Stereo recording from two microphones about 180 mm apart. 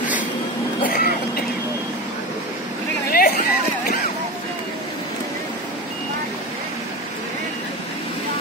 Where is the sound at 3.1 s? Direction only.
55° left (ahead or behind).